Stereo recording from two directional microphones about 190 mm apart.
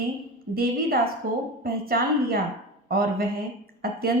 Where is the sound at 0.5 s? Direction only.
50° right (ahead or behind).